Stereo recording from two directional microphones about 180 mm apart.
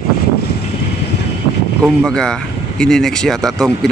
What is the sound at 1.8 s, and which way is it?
Speech, 5° left (ahead or behind).